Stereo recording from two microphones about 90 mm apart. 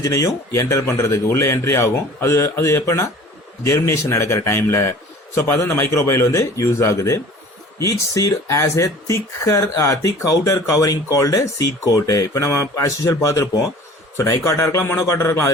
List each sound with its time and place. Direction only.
0.0 s speech: 35° left (ahead or behind)